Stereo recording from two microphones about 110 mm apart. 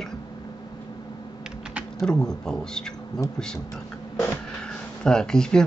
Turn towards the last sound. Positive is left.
turn(degrees=5)  # may be behind; listen again after turning